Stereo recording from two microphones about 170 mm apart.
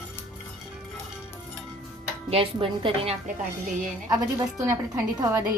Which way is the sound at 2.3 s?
35° right (ahead or behind).